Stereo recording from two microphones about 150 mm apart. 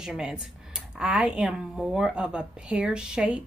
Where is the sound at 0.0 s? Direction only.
5° right (ahead or behind).